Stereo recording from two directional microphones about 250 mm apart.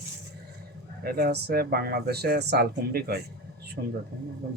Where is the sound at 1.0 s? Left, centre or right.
Right.